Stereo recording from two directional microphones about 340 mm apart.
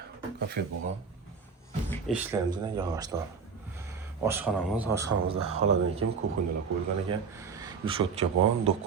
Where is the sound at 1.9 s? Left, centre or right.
Centre.